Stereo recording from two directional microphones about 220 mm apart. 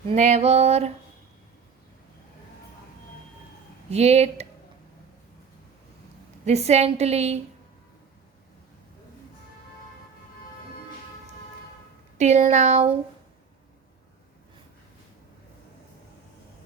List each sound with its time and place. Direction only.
0.1 s a woman's voice: 30° right (ahead or behind)
3.8 s a woman's voice: 30° right (ahead or behind)
6.4 s a woman's voice: 30° right (ahead or behind)
12.1 s speech: 30° right (ahead or behind)